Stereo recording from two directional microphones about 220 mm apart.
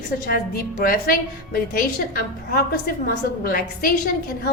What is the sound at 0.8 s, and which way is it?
A woman's voice, 40° left (ahead or behind).